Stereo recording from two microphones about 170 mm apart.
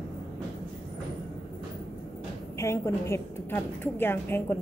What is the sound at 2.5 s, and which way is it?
A woman's voice, 15° left (ahead or behind).